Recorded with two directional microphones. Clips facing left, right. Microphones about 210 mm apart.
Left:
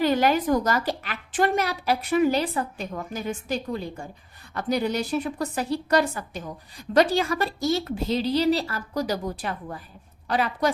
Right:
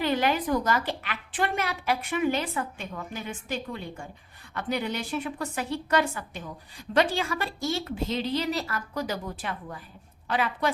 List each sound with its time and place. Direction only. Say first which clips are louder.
0.0 s a woman's voice: left 4 dB; 40° left (ahead or behind)